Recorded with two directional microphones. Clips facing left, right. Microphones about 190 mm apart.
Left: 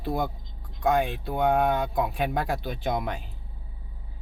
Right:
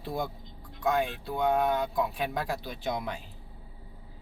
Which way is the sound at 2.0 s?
55° left (ahead or behind).